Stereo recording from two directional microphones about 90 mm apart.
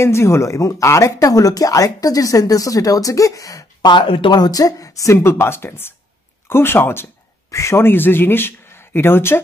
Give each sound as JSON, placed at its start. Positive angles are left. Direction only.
{"t": 0.0, "sound": "speech", "side_deg": 30}
{"t": 3.8, "sound": "speech", "side_deg": 65}
{"t": 4.3, "sound": "speech", "side_deg": 45}